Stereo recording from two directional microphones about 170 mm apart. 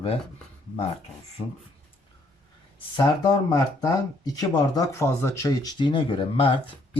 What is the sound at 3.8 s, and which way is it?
Speech, 20° left (ahead or behind).